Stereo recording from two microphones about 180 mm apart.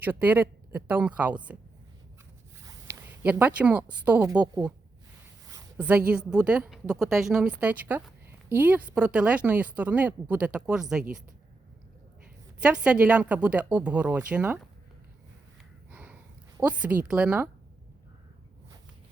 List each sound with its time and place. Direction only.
0.0 s speech: 10° right (ahead or behind)
2.6 s speech: 15° right (ahead or behind)
5.5 s a sound: 20° right (ahead or behind)
6.1 s a woman's voice: 5° right (ahead or behind)
12.6 s speech: 5° right (ahead or behind)
15.9 s sniff: 10° right (ahead or behind)
17.1 s speech: 5° right (ahead or behind)